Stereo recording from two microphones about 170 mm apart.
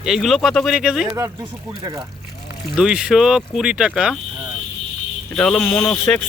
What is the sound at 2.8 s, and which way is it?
Speech, 5° right (ahead or behind).